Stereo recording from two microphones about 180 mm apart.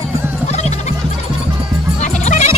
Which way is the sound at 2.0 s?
40° left (ahead or behind).